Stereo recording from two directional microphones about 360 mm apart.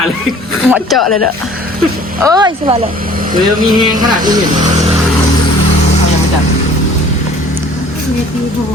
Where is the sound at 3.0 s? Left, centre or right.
Right.